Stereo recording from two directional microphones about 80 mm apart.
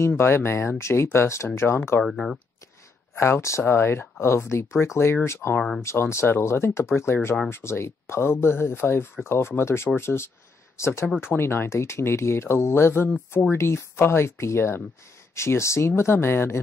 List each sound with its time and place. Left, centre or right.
0.2 s speech: left
2.0 s speech: centre
3.2 s speech: left